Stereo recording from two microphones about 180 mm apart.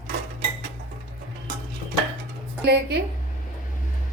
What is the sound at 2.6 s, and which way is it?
Speech, 65° right (ahead or behind).